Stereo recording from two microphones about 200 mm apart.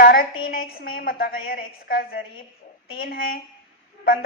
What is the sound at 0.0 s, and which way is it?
Speech, 45° left (ahead or behind).